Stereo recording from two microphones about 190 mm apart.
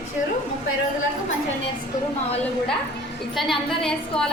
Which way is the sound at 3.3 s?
Centre (ahead or behind).